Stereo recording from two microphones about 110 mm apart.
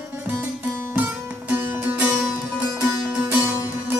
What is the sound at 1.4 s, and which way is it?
Music, 20° right (ahead or behind).